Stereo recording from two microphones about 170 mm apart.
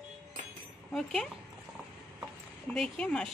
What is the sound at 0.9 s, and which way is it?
Speech, centre (ahead or behind).